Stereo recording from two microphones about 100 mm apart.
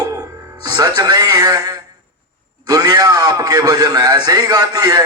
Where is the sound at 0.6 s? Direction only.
45° right (ahead or behind).